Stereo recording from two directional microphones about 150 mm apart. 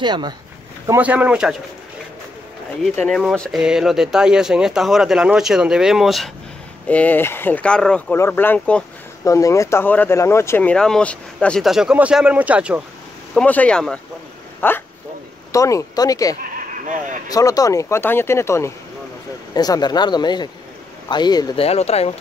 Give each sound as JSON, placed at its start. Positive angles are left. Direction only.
{"t": 0.0, "sound": "speech", "side_deg": -30}
{"t": 0.8, "sound": "speech", "side_deg": -10}
{"t": 2.8, "sound": "speech", "side_deg": 0}
{"t": 6.9, "sound": "speech", "side_deg": 10}
{"t": 9.2, "sound": "speech", "side_deg": 20}
{"t": 13.3, "sound": "speech", "side_deg": 10}
{"t": 16.8, "sound": "speech", "side_deg": -60}
{"t": 17.3, "sound": "speech", "side_deg": 25}
{"t": 21.5, "sound": "speech", "side_deg": 45}